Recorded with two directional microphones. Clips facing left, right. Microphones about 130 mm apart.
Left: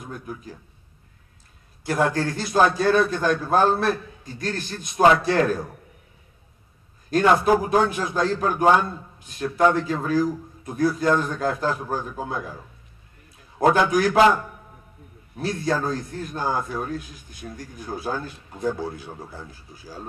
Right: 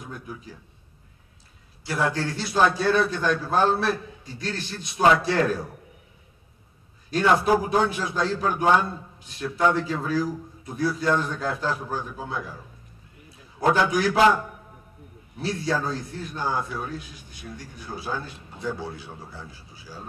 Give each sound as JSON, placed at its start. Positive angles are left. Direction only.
{"t": 0.1, "sound": "a man's voice", "side_deg": 45}
{"t": 1.9, "sound": "a man's voice", "side_deg": 45}
{"t": 7.4, "sound": "a man's voice", "side_deg": 45}
{"t": 13.6, "sound": "a man's voice", "side_deg": 45}
{"t": 15.3, "sound": "a man's voice", "side_deg": 45}